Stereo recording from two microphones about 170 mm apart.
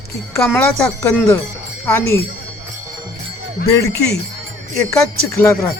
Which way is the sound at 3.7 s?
20° left (ahead or behind).